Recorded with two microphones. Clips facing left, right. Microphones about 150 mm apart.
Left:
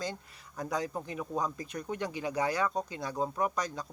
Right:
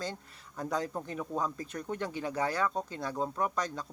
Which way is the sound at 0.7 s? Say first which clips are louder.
Even; 5° left (ahead or behind).